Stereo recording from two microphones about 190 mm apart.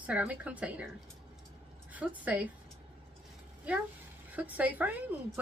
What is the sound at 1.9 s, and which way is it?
Speech, 10° right (ahead or behind).